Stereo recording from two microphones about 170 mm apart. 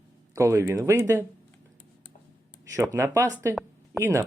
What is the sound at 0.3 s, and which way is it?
Speech, 15° right (ahead or behind).